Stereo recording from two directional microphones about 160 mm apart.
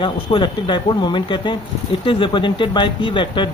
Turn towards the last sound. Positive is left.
turn(degrees=30)  # may be behind; listen again after turning